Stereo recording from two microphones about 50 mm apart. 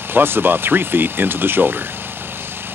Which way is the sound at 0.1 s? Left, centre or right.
Right.